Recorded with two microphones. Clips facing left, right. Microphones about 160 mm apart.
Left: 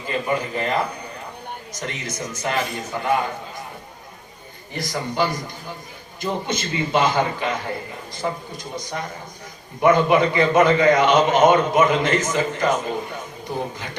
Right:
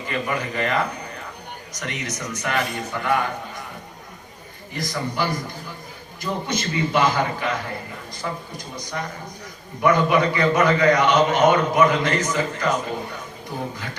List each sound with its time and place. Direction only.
0.1 s a man's voice: 30° left (ahead or behind)
1.8 s a man's voice: 30° left (ahead or behind)
4.7 s a man's voice: 30° left (ahead or behind)
9.8 s a man's voice: 25° left (ahead or behind)